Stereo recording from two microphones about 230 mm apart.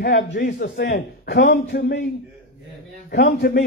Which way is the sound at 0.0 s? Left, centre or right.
Left.